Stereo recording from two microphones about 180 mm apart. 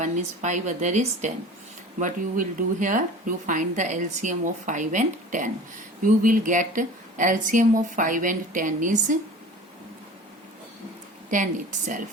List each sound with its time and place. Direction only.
0.0 s a woman's voice: 40° right (ahead or behind)